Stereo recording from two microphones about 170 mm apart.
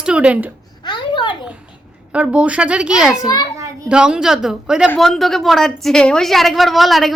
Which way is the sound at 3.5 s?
20° right (ahead or behind).